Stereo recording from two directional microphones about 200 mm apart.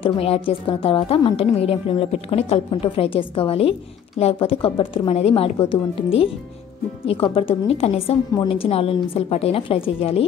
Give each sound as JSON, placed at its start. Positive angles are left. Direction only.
{"t": 0.0, "sound": "a woman's voice", "side_deg": 30}
{"t": 7.3, "sound": "a woman's voice", "side_deg": 30}